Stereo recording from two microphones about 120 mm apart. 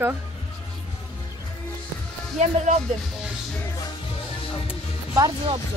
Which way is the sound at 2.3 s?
70° right (ahead or behind).